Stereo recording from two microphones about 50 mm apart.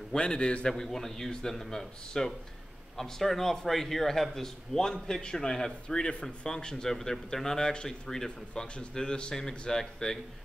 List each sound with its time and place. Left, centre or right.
0.1 s a man's voice: centre
0.7 s a man's voice: centre